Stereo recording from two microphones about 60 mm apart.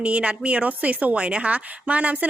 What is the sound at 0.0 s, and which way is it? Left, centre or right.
A woman's voice, right.